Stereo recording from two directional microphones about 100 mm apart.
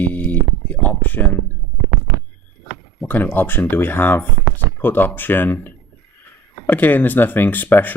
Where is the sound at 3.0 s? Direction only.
20° left (ahead or behind).